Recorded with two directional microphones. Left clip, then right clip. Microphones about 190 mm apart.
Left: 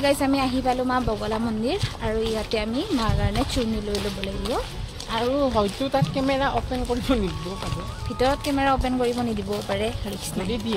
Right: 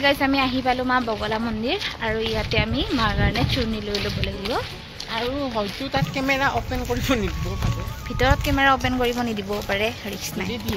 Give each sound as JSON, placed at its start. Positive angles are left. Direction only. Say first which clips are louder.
{"t": 0.0, "sound": "speech", "louder": "right 2 dB", "side_deg": 0}
{"t": 5.1, "sound": "speech", "louder": "left 3 dB", "side_deg": 60}
{"t": 6.1, "sound": "speech", "louder": "right 1 dB", "side_deg": 15}
{"t": 8.2, "sound": "speech", "louder": "right 2 dB", "side_deg": 0}